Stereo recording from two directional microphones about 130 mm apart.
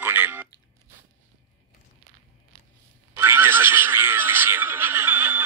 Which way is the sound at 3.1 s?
15° right (ahead or behind).